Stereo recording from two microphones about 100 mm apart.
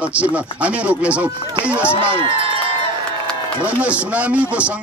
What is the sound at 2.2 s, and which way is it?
Crowd, 60° right (ahead or behind).